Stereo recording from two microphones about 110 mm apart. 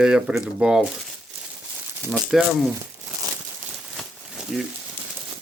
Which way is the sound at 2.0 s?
5° right (ahead or behind).